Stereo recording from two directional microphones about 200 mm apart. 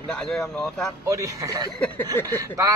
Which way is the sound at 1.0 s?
15° right (ahead or behind).